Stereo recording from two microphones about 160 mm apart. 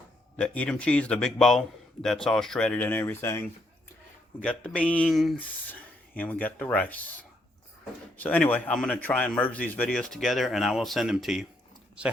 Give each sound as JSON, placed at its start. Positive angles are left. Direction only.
{"t": 0.3, "sound": "a man's voice", "side_deg": 10}
{"t": 5.4, "sound": "a man's voice", "side_deg": 10}